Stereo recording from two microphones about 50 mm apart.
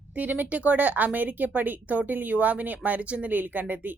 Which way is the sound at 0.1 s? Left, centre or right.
Right.